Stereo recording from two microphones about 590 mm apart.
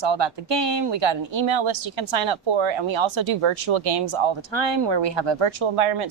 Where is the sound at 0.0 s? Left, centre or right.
Right.